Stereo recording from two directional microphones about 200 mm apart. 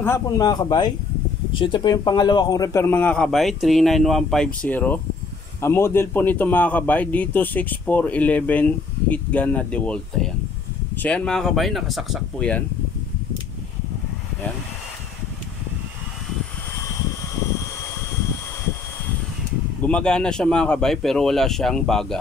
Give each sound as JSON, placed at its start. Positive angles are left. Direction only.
{"t": 0.0, "sound": "a man's voice", "side_deg": 15}
{"t": 19.8, "sound": "a man's voice", "side_deg": 5}